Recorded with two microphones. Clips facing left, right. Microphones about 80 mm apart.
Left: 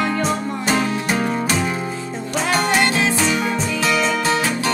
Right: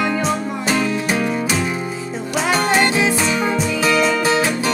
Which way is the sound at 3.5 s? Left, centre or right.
Centre.